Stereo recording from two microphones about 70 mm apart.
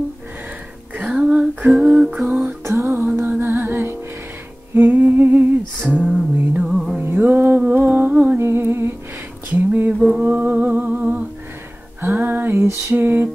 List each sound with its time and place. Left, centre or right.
1.1 s female singing: centre
1.8 s lullaby: centre
2.1 s music: centre
2.6 s music: right
4.7 s lullaby: right
6.3 s music: centre
7.0 s music: right
8.4 s humming: right
9.5 s a sound: right
9.9 s a sound: centre
10.2 s humming: right
12.0 s music: right
12.9 s a sound: right